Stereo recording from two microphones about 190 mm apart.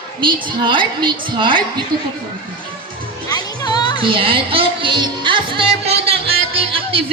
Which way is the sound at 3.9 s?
30° right (ahead or behind).